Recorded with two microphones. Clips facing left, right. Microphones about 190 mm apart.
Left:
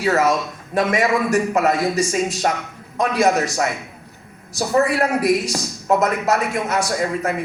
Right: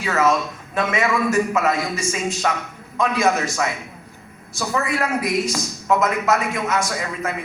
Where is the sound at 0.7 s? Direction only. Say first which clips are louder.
Left 3 dB; 40° left (ahead or behind).